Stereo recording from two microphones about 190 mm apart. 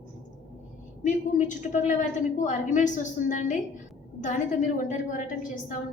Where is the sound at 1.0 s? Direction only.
40° left (ahead or behind).